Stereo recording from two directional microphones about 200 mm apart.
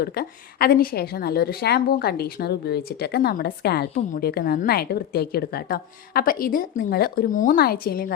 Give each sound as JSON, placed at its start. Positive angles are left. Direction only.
{"t": 0.0, "sound": "a woman's voice", "side_deg": 50}